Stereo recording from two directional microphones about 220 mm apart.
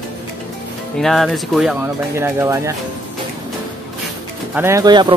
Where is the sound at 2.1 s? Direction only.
10° right (ahead or behind).